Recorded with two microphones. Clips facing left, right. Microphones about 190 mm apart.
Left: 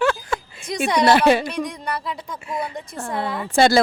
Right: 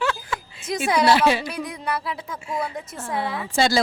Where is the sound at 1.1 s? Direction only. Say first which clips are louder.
Left 5 dB; 55° left (ahead or behind).